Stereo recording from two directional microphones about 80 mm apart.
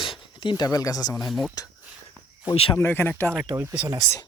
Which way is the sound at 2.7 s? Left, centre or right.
Left.